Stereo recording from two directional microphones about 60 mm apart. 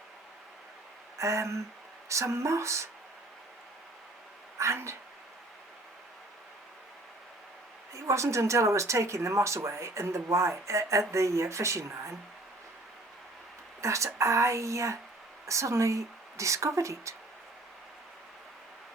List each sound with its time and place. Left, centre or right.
1.2 s speech: right
4.5 s speech: right
7.9 s speech: right
13.8 s speech: right